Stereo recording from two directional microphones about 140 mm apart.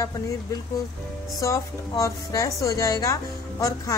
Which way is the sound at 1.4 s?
20° left (ahead or behind).